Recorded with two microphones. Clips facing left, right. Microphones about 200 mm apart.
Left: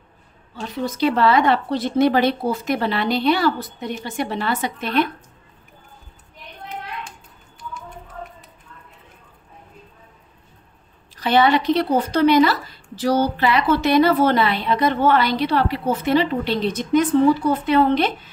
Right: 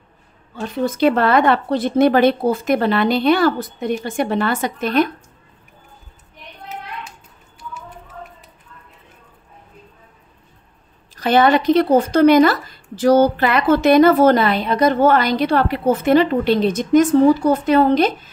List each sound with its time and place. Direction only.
0.6 s speech: 55° right (ahead or behind)
11.1 s speech: 45° right (ahead or behind)